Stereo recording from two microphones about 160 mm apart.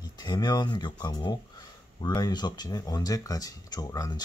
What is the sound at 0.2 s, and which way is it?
Speech, 25° left (ahead or behind).